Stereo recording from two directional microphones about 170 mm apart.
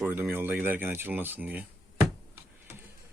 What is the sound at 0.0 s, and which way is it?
Speech, 10° right (ahead or behind).